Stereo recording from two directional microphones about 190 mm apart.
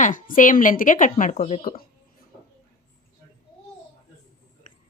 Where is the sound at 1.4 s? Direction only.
30° left (ahead or behind).